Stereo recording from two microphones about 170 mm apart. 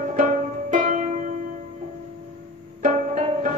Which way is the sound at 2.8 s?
45° right (ahead or behind).